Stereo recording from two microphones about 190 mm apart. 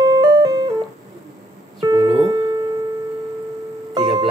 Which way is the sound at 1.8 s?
20° right (ahead or behind).